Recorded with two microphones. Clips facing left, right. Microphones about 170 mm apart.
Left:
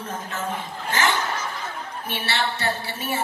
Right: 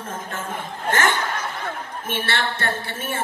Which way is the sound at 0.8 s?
50° right (ahead or behind).